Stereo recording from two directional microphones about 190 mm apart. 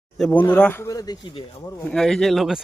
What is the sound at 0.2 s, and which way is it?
Speech, 5° left (ahead or behind).